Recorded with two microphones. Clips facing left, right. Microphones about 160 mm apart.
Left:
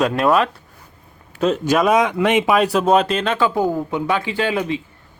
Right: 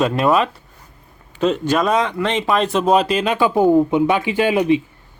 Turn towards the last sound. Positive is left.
turn(degrees=-15)  # may be behind; listen again after turning